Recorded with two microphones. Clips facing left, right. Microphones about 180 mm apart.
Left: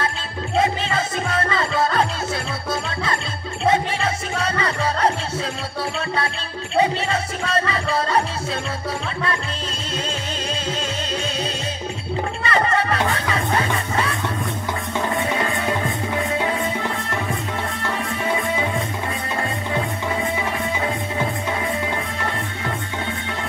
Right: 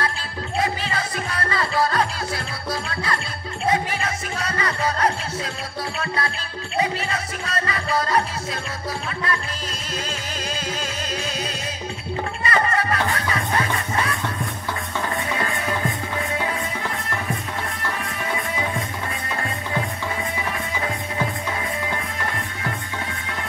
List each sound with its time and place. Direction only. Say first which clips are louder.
0.6 s music: left 4 dB; 25° left (ahead or behind)
12.4 s music: left 2 dB; 25° left (ahead or behind)
15.1 s music: left 3 dB; 25° left (ahead or behind)
18.2 s music: left 4 dB; 25° left (ahead or behind)